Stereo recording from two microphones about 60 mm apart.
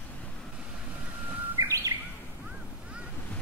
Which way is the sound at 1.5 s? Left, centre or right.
Right.